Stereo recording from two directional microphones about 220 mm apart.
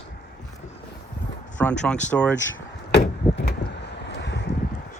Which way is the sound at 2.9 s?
50° left (ahead or behind).